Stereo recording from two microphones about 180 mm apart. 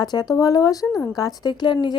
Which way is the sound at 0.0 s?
20° left (ahead or behind).